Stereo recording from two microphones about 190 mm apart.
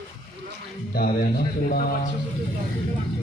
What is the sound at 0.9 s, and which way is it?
Speech, 50° left (ahead or behind).